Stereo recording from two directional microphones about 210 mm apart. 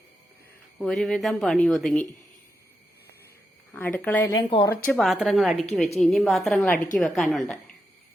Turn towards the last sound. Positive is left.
turn(degrees=0)  # may be behind; listen again after turning